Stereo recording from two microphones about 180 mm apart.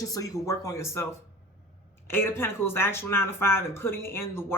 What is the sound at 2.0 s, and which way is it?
Speech, 15° left (ahead or behind).